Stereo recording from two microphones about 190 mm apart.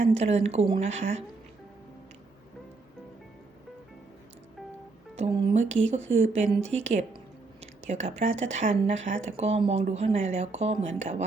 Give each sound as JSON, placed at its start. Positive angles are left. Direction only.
{"t": 0.1, "sound": "speech", "side_deg": -35}
{"t": 5.1, "sound": "speech", "side_deg": -30}